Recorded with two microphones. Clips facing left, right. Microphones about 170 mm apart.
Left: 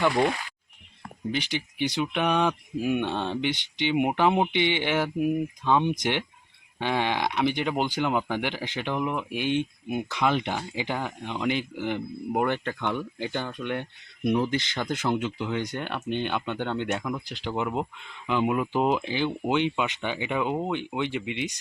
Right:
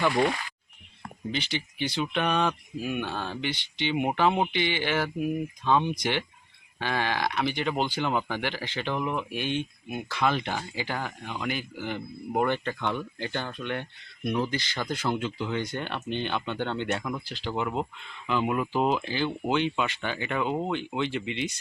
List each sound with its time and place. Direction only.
1.3 s speech: 10° left (ahead or behind)
17.2 s speech: 15° left (ahead or behind)